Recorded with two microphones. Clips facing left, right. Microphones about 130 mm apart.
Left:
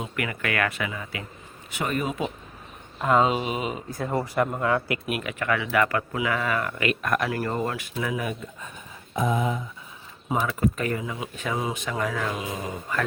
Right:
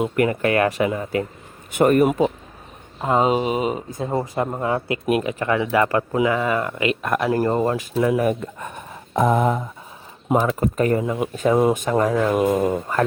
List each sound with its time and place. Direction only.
0.2 s speech: 35° right (ahead or behind); by 2.1 s 55° right (ahead or behind)
3.0 s speech: 25° right (ahead or behind)
3.2 s speech: 40° right (ahead or behind)
3.8 s speech: 20° right (ahead or behind)
7.3 s speech: 30° right (ahead or behind)
8.1 s speech: 55° right (ahead or behind)
10.3 s speech: 40° right (ahead or behind)
12.3 s speech: 55° right (ahead or behind)